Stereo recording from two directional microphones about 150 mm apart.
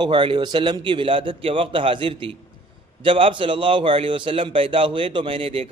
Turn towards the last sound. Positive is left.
turn(degrees=-35)  # may be behind; listen again after turning